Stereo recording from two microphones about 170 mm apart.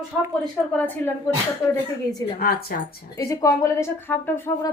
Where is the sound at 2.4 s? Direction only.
65° left (ahead or behind).